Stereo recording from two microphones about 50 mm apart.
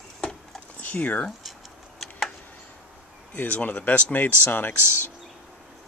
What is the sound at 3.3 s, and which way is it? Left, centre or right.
Speech, left.